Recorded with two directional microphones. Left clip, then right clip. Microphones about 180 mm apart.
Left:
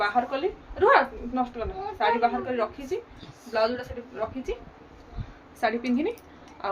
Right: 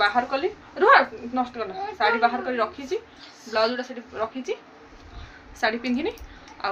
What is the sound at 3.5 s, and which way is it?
Speech, 25° right (ahead or behind).